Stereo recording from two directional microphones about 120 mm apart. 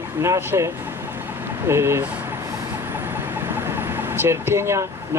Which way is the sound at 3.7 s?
15° right (ahead or behind).